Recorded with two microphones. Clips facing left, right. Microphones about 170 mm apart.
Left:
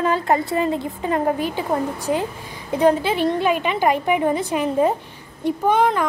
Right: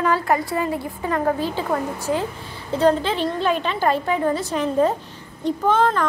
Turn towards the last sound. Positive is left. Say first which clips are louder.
# left 1 dB
turn(degrees=15)  # may be behind; listen again after turning